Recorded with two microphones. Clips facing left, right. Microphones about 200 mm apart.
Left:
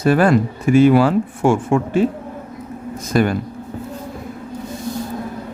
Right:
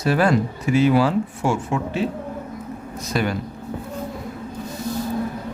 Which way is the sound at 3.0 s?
50° left (ahead or behind).